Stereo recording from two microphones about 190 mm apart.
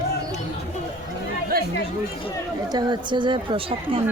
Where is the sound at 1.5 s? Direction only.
50° right (ahead or behind).